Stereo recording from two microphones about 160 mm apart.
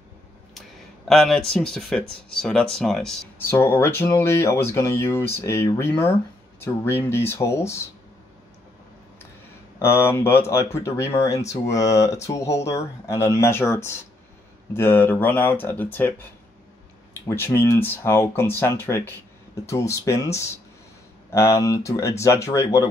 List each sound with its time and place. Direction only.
0.6 s speech: centre (ahead or behind)
3.3 s speech: 15° left (ahead or behind)
9.8 s speech: 15° left (ahead or behind)
17.3 s speech: 15° left (ahead or behind)